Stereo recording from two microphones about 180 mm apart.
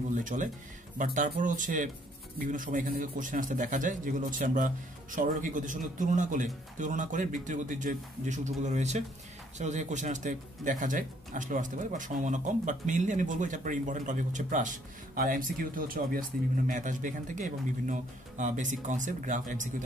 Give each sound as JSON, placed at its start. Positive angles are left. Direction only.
{"t": 0.1, "sound": "speech", "side_deg": -45}